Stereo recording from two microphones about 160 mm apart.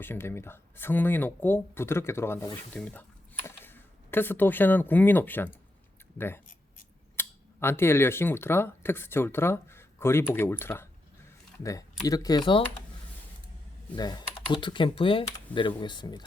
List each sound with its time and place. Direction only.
0.0 s speech: 15° left (ahead or behind); by 12.6 s 30° left (ahead or behind)
13.9 s speech: 25° left (ahead or behind)